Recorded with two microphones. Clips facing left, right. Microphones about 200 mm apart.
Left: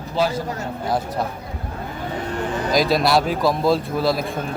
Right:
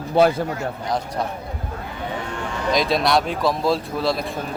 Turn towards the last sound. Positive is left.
turn(degrees=0)  # may be behind; listen again after turning